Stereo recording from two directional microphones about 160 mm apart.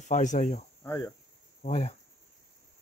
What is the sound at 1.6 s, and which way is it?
Speech, 45° left (ahead or behind).